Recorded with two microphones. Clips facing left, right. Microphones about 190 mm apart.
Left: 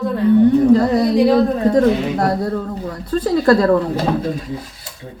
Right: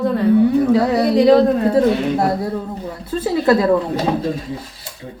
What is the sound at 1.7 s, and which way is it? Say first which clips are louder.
Speech: even; 25° right (ahead or behind).